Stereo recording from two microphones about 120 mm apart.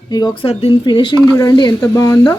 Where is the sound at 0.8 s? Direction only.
40° left (ahead or behind).